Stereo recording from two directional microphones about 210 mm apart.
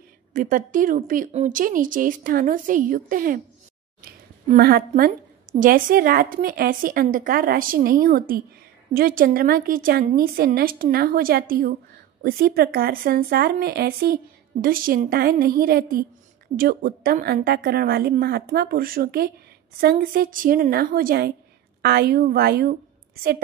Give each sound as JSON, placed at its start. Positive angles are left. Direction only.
{"t": 0.3, "sound": "a woman's voice", "side_deg": -40}